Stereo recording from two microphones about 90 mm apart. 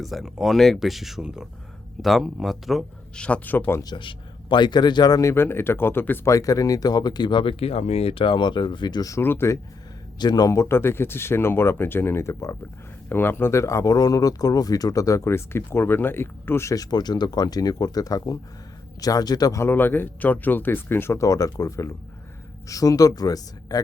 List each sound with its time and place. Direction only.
0.0 s speech: centre (ahead or behind)
3.2 s speech: 15° left (ahead or behind)
3.8 s speech: 65° left (ahead or behind); by 5.3 s 45° left (ahead or behind)
5.3 s speech: 25° left (ahead or behind)
6.3 s speech: 40° left (ahead or behind); by 9.0 s 55° left (ahead or behind)
9.2 s speech: 25° left (ahead or behind)
10.2 s speech: 50° left (ahead or behind)
10.5 s speech: 30° left (ahead or behind)
13.1 s speech: 25° left (ahead or behind)
16.7 s speech: 45° left (ahead or behind)
19.6 s speech: 20° left (ahead or behind)
21.2 s speech: 40° left (ahead or behind)